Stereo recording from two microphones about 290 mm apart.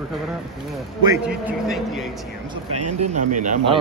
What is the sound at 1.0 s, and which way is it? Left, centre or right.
A man's voice, centre.